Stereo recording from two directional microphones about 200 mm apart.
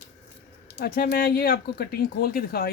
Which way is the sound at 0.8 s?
50° left (ahead or behind).